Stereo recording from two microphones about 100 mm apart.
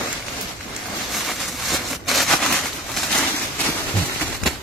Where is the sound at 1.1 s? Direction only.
Centre (ahead or behind).